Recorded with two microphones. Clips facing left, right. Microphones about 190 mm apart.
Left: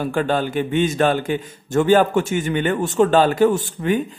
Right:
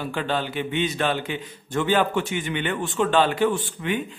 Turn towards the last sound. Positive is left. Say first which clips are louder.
# left 6 dB
turn(degrees=40)  # may be behind; listen again after turning